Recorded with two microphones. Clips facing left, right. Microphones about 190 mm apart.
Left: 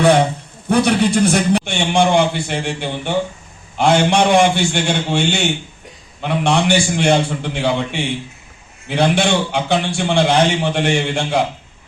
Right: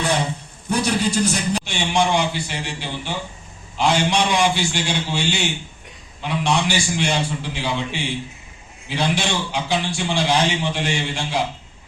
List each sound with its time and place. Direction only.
0.0 s a man's voice: 60° left (ahead or behind)